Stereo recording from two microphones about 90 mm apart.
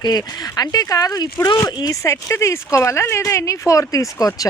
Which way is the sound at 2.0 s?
35° left (ahead or behind).